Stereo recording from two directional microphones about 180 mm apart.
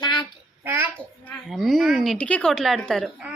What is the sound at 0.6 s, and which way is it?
Speech, 15° right (ahead or behind).